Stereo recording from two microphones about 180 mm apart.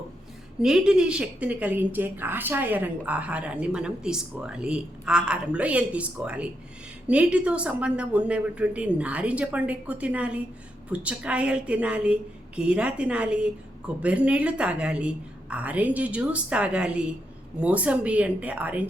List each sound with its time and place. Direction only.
0.6 s a woman's voice: 5° right (ahead or behind)